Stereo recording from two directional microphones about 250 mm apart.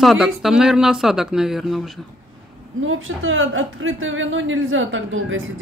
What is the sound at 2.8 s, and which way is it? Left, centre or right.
A woman's voice, right.